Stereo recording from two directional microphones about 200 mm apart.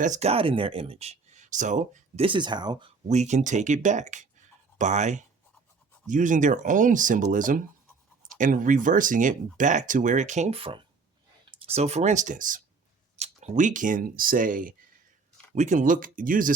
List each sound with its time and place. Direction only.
0.0 s speech: 35° right (ahead or behind)
2.2 s speech: 25° right (ahead or behind)
3.1 s speech: 35° right (ahead or behind)